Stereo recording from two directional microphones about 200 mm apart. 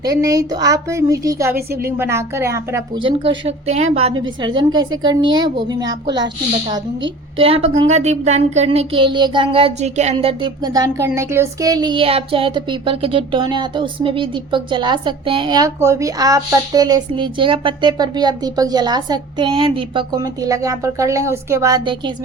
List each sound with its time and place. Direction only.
0.0 s a woman's voice: 15° right (ahead or behind)
1.5 s a woman's voice: 50° right (ahead or behind)
2.0 s a woman's voice: 15° right (ahead or behind)
3.0 s a woman's voice: 25° right (ahead or behind)
4.4 s a woman's voice: 20° right (ahead or behind)